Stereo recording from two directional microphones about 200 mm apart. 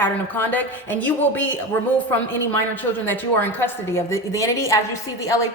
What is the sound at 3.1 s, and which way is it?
A woman's voice, 10° left (ahead or behind).